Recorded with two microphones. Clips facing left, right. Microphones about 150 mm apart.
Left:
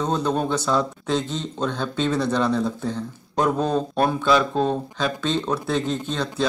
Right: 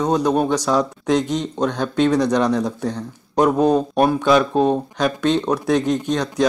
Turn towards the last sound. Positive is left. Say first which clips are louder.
# right 5 dB
turn(degrees=-15)  # may be behind; listen again after turning